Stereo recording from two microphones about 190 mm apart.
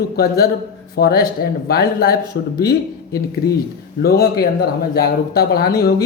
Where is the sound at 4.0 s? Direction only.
55° left (ahead or behind).